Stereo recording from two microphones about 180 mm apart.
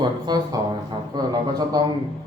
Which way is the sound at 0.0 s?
20° right (ahead or behind).